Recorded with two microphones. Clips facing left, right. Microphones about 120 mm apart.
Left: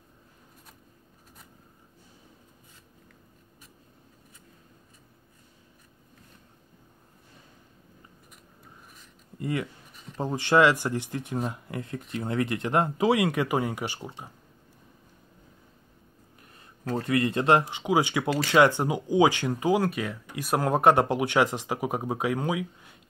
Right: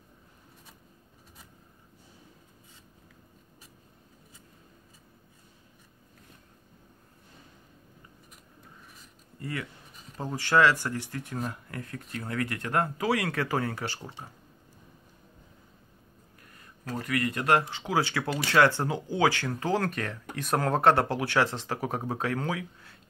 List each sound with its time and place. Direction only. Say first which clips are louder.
9.4 s speech: left 6 dB; 20° left (ahead or behind)
16.5 s speech: left 5 dB; 25° left (ahead or behind)